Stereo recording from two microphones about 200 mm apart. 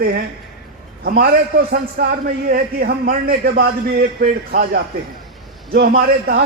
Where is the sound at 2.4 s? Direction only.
45° right (ahead or behind).